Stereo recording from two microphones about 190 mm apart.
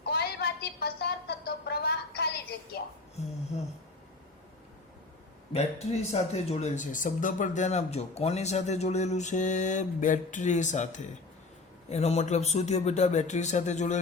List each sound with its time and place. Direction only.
0.0 s a sound: 55° left (ahead or behind)
3.5 s speech: 35° left (ahead or behind)
5.5 s speech: 35° left (ahead or behind)